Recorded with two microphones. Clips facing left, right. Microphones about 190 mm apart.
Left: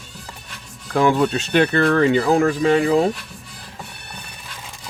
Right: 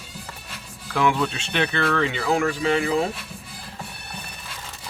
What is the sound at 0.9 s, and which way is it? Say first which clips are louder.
Speech: left 5 dB; 40° left (ahead or behind).